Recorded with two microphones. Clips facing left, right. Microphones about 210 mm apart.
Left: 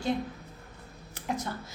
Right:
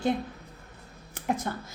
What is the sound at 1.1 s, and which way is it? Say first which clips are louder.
Speech: right 4 dB; 50° right (ahead or behind).